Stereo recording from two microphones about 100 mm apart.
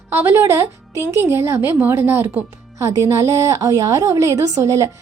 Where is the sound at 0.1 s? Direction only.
25° right (ahead or behind).